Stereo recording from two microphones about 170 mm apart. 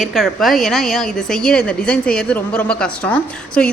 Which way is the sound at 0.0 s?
Centre (ahead or behind).